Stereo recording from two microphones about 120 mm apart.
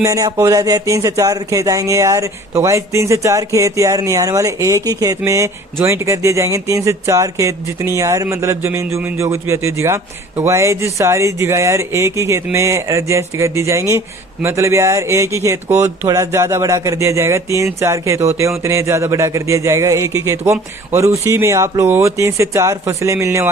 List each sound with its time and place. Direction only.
0.0 s speech: 30° right (ahead or behind)